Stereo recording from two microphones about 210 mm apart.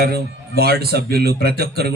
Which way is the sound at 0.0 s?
50° right (ahead or behind).